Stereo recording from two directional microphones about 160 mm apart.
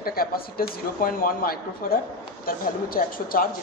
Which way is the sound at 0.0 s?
70° left (ahead or behind).